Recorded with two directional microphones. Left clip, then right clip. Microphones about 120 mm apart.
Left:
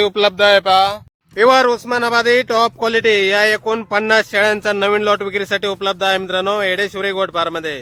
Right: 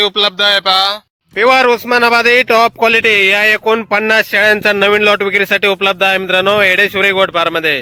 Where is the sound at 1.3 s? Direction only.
40° right (ahead or behind).